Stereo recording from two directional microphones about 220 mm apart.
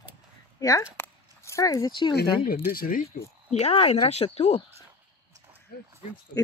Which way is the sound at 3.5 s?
30° left (ahead or behind).